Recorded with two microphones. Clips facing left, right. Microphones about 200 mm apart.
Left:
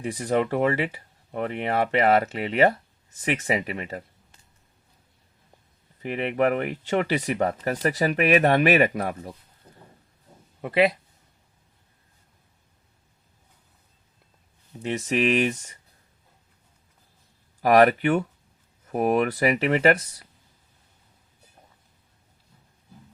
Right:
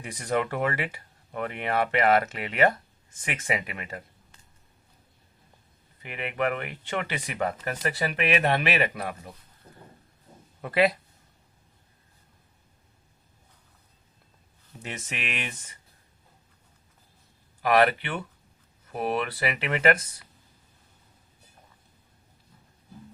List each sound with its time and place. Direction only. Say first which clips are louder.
0.0 s speech: left 4 dB; 30° left (ahead or behind)
6.0 s speech: left 6 dB; 35° left (ahead or behind)
10.6 s speech: left 2 dB; 20° left (ahead or behind)
14.8 s speech: left 13 dB; 35° left (ahead or behind)
17.6 s speech: left 5 dB; 40° left (ahead or behind)